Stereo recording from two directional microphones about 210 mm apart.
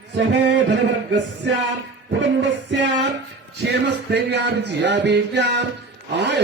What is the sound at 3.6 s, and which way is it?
A man's voice, 55° right (ahead or behind).